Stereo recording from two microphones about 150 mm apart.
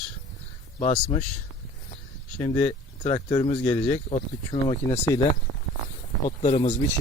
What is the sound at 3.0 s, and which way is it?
Speech, 35° left (ahead or behind).